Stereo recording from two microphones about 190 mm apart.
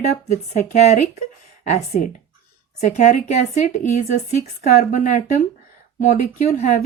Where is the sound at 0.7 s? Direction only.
35° left (ahead or behind).